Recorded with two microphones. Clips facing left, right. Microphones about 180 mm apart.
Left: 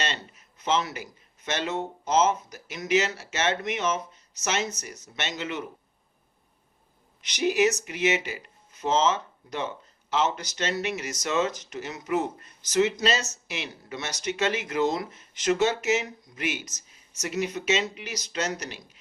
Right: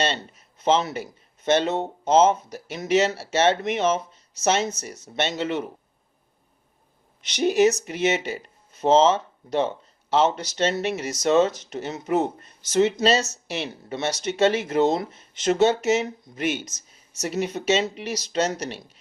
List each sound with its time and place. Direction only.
0.6 s speech: 30° right (ahead or behind)
7.3 s speech: 30° right (ahead or behind)